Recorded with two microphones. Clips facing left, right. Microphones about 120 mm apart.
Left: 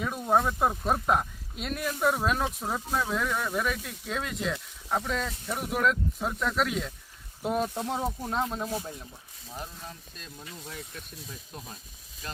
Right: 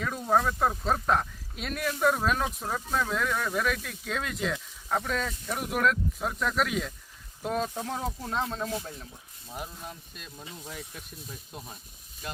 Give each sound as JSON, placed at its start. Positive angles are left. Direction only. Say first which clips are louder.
{"t": 0.4, "sound": "speech", "louder": "even", "side_deg": 10}
{"t": 7.4, "sound": "speech", "louder": "left 2 dB", "side_deg": 10}
{"t": 9.6, "sound": "speech", "louder": "right 2 dB", "side_deg": -10}
{"t": 10.4, "sound": "speech", "louder": "right 1 dB", "side_deg": -20}